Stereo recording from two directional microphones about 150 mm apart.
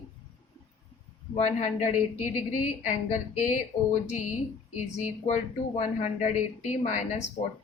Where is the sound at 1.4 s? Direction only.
50° left (ahead or behind).